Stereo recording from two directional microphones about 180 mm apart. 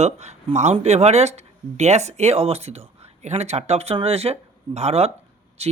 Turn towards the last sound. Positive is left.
turn(degrees=-35)  # may be behind; listen again after turning